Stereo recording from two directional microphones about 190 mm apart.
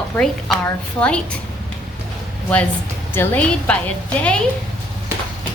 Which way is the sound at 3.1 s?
10° left (ahead or behind).